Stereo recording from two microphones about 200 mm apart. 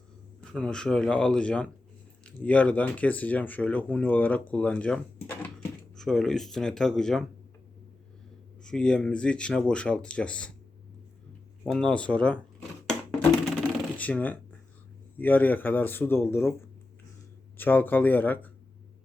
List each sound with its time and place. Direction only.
0.5 s speech: 5° left (ahead or behind)
8.6 s speech: 5° left (ahead or behind)
11.6 s speech: 5° left (ahead or behind)
12.9 s a sound: 5° left (ahead or behind)
15.2 s speech: 10° left (ahead or behind)